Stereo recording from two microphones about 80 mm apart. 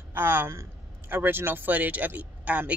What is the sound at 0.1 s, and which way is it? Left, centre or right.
A woman's voice, right.